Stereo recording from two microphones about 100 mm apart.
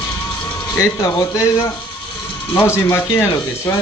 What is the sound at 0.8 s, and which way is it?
Speech, 30° left (ahead or behind).